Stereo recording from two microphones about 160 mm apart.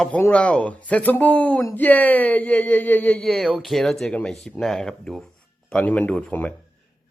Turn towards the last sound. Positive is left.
turn(degrees=10)  # may be behind; listen again after turning